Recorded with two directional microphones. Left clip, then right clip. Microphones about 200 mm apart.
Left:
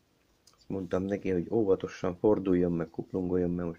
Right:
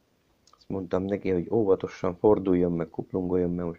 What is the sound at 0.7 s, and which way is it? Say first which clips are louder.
Speech: right 3 dB; 20° left (ahead or behind).